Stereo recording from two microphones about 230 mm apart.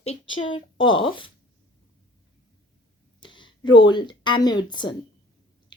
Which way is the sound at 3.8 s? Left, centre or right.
Centre.